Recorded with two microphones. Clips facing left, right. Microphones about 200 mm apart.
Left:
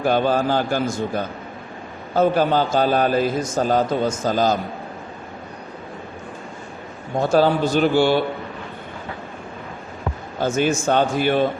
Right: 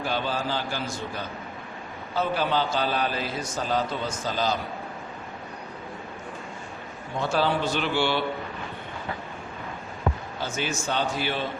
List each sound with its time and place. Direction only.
0.0 s a man's voice: 50° left (ahead or behind)
7.2 s a man's voice: 45° left (ahead or behind)
10.4 s a man's voice: 50° left (ahead or behind)